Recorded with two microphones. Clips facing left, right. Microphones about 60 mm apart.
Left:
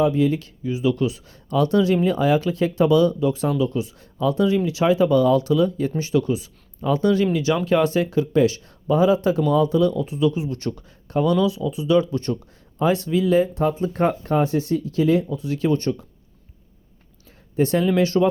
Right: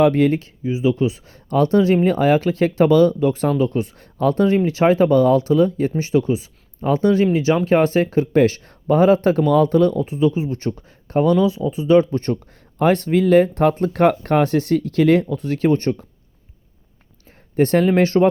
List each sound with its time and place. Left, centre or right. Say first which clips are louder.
0.0 s speech: right 4 dB; right
0.3 s speech: right 3 dB; right
10.1 s speech: right 3 dB; right
12.8 s speech: right 4 dB; right
17.6 s speech: right 4 dB; right